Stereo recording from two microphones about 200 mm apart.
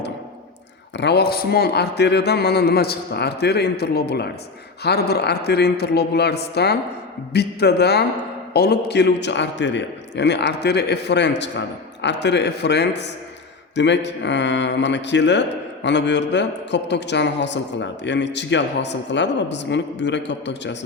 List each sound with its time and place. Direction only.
0.9 s a man's voice: 55° left (ahead or behind)